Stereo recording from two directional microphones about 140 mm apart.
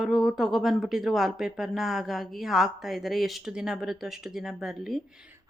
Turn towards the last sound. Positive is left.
turn(degrees=-5)  # may be behind; listen again after turning